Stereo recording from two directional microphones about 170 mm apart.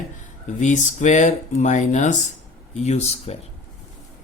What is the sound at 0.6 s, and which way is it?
Speech, 45° left (ahead or behind).